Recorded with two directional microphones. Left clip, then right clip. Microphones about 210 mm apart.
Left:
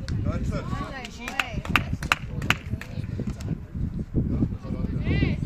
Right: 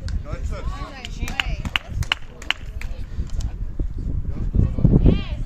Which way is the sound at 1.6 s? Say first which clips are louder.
Left 1 dB; 50° left (ahead or behind).